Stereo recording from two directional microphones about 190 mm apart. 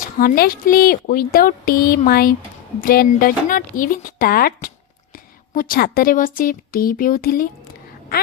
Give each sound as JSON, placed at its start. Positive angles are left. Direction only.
{"t": 0.2, "sound": "a woman's voice", "side_deg": 50}